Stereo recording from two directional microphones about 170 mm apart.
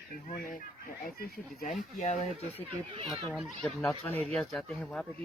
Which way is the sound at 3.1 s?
Centre (ahead or behind).